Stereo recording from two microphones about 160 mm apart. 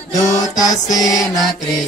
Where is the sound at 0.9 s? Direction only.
20° left (ahead or behind).